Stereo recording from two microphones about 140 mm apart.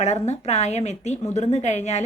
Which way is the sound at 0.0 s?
55° left (ahead or behind).